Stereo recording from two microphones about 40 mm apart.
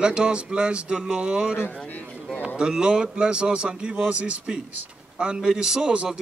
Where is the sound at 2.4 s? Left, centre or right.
Right.